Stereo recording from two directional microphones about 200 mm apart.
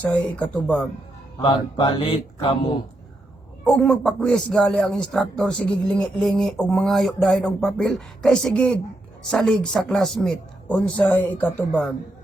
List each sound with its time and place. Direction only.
0.0 s speech: 5° left (ahead or behind)
1.4 s speech: 25° left (ahead or behind)
3.6 s speech: 5° left (ahead or behind)